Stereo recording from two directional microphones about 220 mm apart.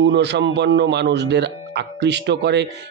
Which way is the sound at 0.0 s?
50° right (ahead or behind).